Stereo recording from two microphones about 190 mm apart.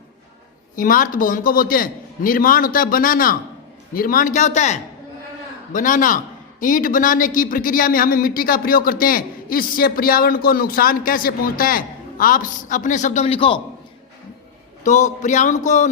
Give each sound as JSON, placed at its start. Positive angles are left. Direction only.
{"t": 0.8, "sound": "speech", "side_deg": 45}
{"t": 14.8, "sound": "speech", "side_deg": 40}